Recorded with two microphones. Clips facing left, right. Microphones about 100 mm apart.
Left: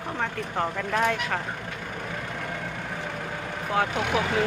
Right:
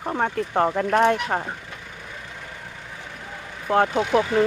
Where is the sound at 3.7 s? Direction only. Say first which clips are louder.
Right 6 dB; 50° right (ahead or behind).